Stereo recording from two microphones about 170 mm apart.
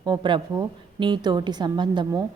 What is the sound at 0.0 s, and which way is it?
Speech, 25° right (ahead or behind).